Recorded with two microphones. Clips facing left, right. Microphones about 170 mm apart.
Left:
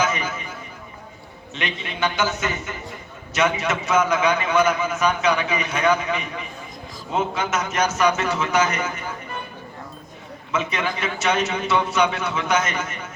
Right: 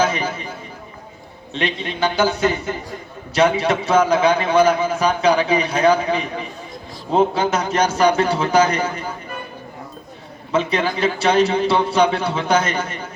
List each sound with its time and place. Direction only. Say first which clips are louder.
0.0 s a man's voice: right 4 dB; 30° right (ahead or behind)
1.5 s a man's voice: right 6 dB; 35° right (ahead or behind)
10.5 s a man's voice: right 6 dB; 30° right (ahead or behind)